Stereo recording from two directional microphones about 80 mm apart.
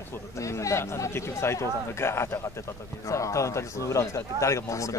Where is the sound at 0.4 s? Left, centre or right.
Left.